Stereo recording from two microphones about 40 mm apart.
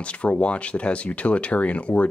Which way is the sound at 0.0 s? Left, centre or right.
Left.